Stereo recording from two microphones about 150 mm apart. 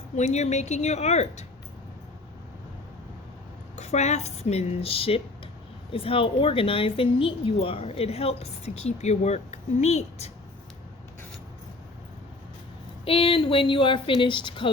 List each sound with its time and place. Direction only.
0.2 s speech: 50° left (ahead or behind)
3.8 s a woman's voice: 50° left (ahead or behind)
13.1 s a woman's voice: 40° left (ahead or behind)